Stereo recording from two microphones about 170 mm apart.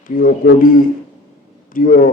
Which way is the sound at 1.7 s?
55° left (ahead or behind).